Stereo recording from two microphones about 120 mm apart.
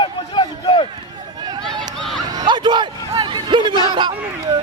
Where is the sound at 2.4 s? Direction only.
40° right (ahead or behind).